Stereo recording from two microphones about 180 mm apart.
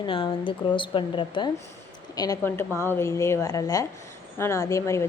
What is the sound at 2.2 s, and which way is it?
A woman's voice, 15° left (ahead or behind).